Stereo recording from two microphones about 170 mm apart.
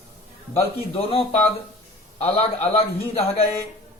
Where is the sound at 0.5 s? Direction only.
35° left (ahead or behind).